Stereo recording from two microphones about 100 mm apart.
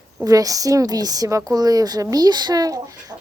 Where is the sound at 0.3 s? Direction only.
35° right (ahead or behind).